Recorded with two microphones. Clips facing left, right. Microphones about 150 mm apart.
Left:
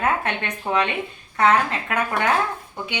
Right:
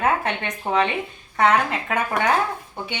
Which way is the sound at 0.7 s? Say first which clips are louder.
Right 1 dB; 20° right (ahead or behind).